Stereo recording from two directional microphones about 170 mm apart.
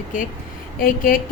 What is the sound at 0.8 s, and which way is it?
Speech, 55° left (ahead or behind).